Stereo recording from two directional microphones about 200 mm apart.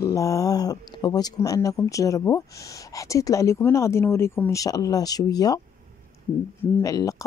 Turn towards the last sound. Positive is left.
turn(degrees=15)  # may be behind; listen again after turning